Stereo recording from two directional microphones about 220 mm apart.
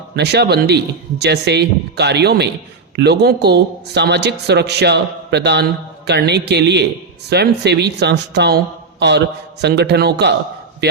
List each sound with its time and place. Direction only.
0.2 s a man's voice: 50° right (ahead or behind)